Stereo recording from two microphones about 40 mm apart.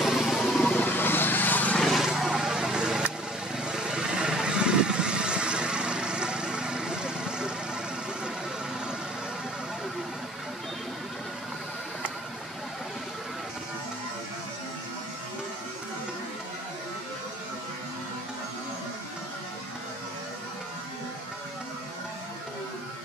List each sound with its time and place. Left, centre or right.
0.0 s vehicle: centre
0.7 s vehicle: left
1.8 s a sound: centre
2.0 s vehicle: centre